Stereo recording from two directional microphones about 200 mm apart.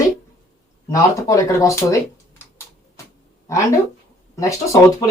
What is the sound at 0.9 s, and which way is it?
Speech, 15° left (ahead or behind).